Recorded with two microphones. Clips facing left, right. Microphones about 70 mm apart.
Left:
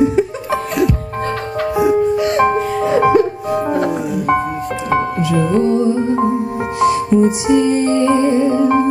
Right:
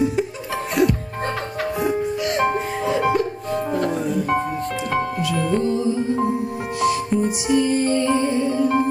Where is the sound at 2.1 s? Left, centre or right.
Left.